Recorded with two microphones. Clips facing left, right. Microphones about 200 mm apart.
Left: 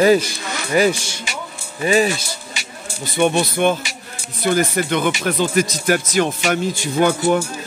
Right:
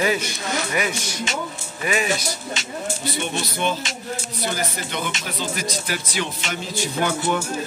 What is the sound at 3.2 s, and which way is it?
Speech, 55° left (ahead or behind).